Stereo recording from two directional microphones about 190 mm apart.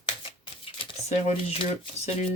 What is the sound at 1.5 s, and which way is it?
Speech, 30° left (ahead or behind).